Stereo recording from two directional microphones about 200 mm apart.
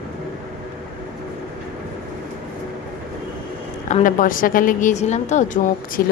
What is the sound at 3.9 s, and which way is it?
A woman's voice, 40° left (ahead or behind).